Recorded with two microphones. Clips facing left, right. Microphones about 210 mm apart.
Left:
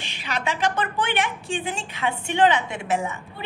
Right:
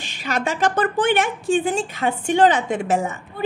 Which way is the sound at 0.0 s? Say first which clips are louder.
Right 4 dB; 45° right (ahead or behind).